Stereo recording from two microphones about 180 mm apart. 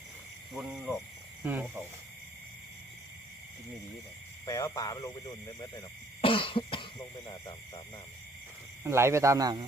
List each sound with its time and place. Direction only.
0.5 s speech: centre (ahead or behind)
1.5 s speech: 10° right (ahead or behind)
4.4 s speech: 20° left (ahead or behind)
6.2 s speech: 30° left (ahead or behind)
8.8 s speech: 15° right (ahead or behind)